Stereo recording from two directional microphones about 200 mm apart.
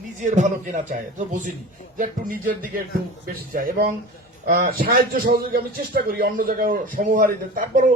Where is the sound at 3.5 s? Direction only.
45° right (ahead or behind).